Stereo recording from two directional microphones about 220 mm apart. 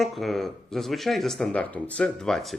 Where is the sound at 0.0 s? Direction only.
Centre (ahead or behind).